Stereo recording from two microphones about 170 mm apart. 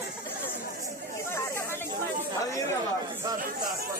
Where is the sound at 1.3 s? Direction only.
15° left (ahead or behind).